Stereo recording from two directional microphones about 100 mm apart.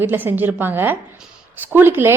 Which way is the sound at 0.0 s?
20° right (ahead or behind).